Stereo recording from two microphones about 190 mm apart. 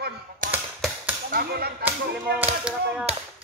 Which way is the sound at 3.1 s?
35° right (ahead or behind).